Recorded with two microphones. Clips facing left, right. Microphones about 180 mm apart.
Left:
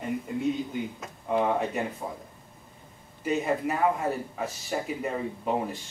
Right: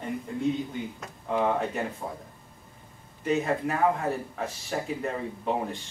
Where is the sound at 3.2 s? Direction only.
5° left (ahead or behind).